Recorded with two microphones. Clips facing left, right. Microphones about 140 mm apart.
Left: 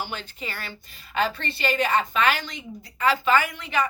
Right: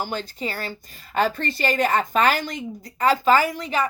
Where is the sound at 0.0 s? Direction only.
35° right (ahead or behind).